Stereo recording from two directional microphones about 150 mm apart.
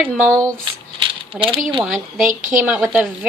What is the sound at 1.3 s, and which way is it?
Speech, 35° right (ahead or behind).